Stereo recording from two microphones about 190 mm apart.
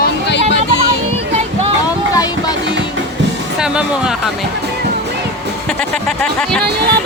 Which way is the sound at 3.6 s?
5° right (ahead or behind).